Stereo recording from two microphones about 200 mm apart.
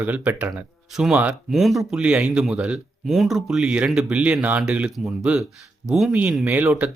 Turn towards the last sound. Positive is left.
turn(degrees=-10)  # may be behind; listen again after turning